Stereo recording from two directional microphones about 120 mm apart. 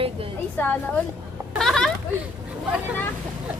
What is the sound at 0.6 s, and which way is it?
Speech, 15° left (ahead or behind).